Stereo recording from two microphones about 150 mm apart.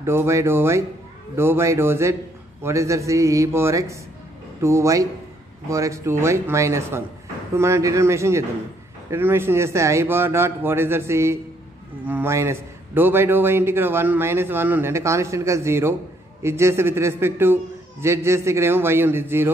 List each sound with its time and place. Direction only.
0.0 s a man's voice: 15° right (ahead or behind)